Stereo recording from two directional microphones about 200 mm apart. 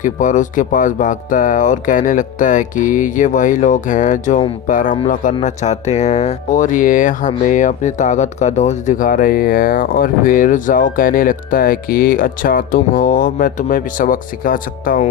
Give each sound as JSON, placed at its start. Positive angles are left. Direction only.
{"t": 0.0, "sound": "speech", "side_deg": 40}